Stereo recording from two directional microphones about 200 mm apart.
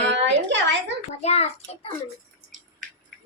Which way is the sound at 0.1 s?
65° right (ahead or behind).